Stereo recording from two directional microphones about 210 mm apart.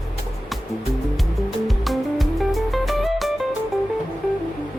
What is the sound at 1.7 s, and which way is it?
Music, centre (ahead or behind).